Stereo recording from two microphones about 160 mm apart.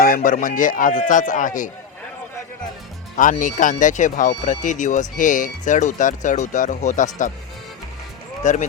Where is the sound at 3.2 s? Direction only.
55° left (ahead or behind).